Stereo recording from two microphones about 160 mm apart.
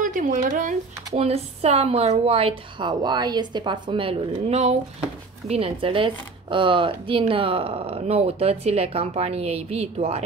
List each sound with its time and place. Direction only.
0.0 s speech: 55° right (ahead or behind)
1.1 s speech: 40° right (ahead or behind)